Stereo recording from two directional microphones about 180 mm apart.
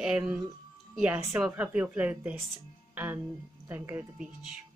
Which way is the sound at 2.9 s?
10° right (ahead or behind).